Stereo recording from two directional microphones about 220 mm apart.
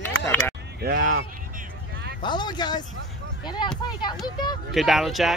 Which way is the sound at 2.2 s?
20° left (ahead or behind).